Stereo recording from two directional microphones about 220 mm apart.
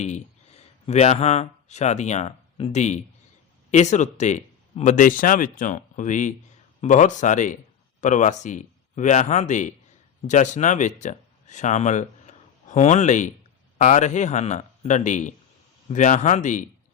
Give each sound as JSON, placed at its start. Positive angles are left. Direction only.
{"t": 0.0, "sound": "speech", "side_deg": 30}